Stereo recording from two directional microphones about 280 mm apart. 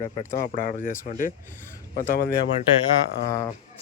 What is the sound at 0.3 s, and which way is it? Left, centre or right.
Speech, left.